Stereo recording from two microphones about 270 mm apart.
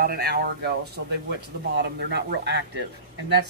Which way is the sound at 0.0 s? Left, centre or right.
Right.